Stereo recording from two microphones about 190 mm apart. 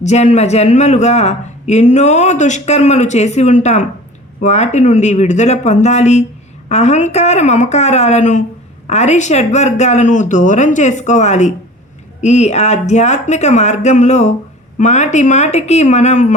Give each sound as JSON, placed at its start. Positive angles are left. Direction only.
{"t": 0.0, "sound": "a man's voice", "side_deg": 35}